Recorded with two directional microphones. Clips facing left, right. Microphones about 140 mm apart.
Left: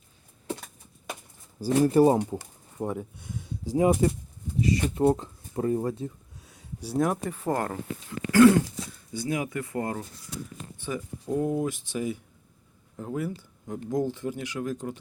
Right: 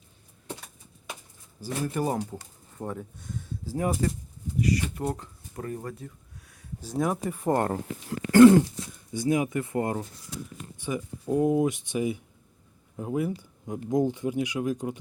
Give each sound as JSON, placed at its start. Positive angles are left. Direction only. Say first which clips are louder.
{"t": 1.6, "sound": "speech", "louder": "left 9 dB", "side_deg": 35}
{"t": 2.7, "sound": "speech", "louder": "left 4 dB", "side_deg": 10}
{"t": 4.6, "sound": "a sound", "louder": "left 5 dB", "side_deg": 25}
{"t": 6.9, "sound": "speech", "louder": "left 1 dB", "side_deg": 0}
{"t": 7.4, "sound": "speech", "louder": "right 4 dB", "side_deg": -25}
{"t": 8.3, "sound": "a sound", "louder": "right 3 dB", "side_deg": -25}
{"t": 9.1, "sound": "speech", "louder": "right 4 dB", "side_deg": -20}
{"t": 10.8, "sound": "speech", "louder": "right 2 dB", "side_deg": -15}